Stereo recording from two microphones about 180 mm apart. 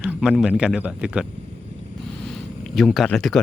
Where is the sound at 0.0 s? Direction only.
Centre (ahead or behind).